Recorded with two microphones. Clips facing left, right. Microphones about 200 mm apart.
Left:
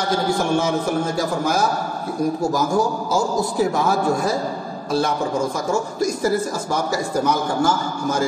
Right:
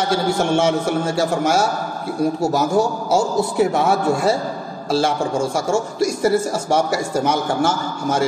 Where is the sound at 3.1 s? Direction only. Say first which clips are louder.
Right 3 dB; 70° right (ahead or behind).